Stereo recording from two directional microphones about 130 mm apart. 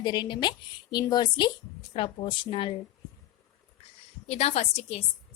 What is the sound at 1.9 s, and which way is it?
Speech, 45° left (ahead or behind).